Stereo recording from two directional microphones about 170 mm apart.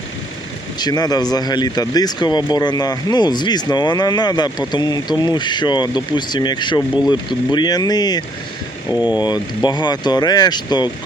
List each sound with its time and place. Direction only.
0.8 s speech: 25° left (ahead or behind)
9.0 s speech: 10° right (ahead or behind)
9.6 s speech: 25° left (ahead or behind)